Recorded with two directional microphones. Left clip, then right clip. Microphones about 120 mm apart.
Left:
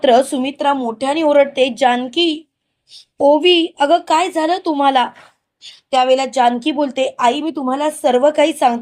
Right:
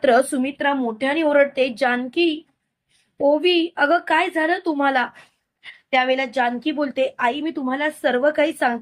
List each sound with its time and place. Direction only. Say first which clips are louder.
0.0 s speech: left 4 dB; 25° left (ahead or behind)
0.6 s a woman's voice: left 5 dB; 35° left (ahead or behind)
5.9 s a woman's voice: left 6 dB; 45° left (ahead or behind); by 7.3 s 25° left (ahead or behind)
7.3 s a woman's voice: left 6 dB; 35° left (ahead or behind)